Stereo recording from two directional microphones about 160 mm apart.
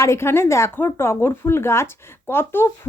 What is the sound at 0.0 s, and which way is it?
Speech, 15° left (ahead or behind).